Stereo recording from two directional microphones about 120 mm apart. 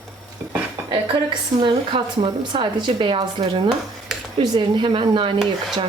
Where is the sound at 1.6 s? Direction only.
45° right (ahead or behind).